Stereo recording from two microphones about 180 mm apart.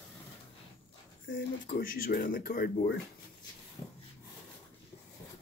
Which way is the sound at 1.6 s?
55° left (ahead or behind).